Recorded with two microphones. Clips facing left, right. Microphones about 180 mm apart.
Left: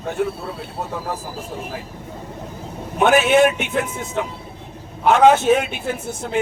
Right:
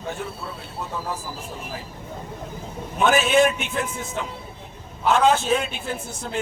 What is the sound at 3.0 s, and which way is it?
A man's voice, 65° left (ahead or behind).